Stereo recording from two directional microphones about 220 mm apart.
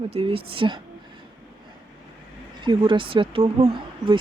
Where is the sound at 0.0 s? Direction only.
25° right (ahead or behind).